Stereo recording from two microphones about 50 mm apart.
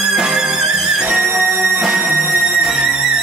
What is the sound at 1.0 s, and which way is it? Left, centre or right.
Music, right.